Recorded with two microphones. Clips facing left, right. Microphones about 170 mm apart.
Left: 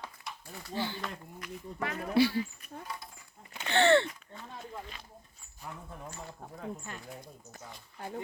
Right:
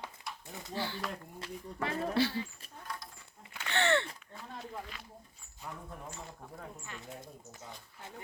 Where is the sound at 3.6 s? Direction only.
30° left (ahead or behind).